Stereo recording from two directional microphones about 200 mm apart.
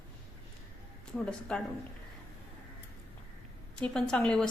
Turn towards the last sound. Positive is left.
turn(degrees=5)  # may be behind; listen again after turning